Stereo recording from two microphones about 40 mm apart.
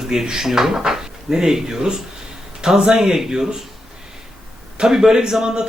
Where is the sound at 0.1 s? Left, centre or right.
Centre.